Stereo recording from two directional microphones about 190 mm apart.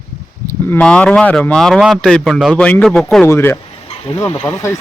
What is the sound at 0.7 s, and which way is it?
A man's voice, 5° left (ahead or behind).